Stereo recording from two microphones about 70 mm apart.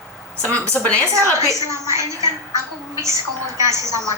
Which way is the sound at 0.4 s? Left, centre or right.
Right.